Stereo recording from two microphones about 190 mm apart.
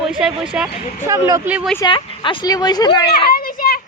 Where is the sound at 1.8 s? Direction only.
25° left (ahead or behind).